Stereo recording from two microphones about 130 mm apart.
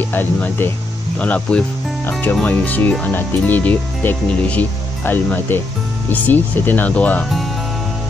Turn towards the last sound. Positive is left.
turn(degrees=10)  # may be behind; listen again after turning